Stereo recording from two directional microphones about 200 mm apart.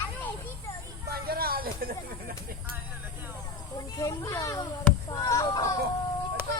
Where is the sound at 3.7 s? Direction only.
20° left (ahead or behind).